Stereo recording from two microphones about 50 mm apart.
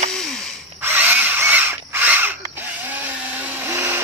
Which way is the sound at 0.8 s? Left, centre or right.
Right.